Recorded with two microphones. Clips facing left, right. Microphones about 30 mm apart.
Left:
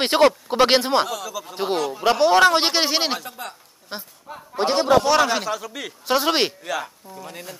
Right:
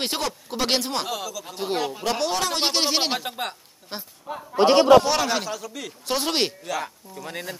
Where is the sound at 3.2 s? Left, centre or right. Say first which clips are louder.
Right 4 dB; right.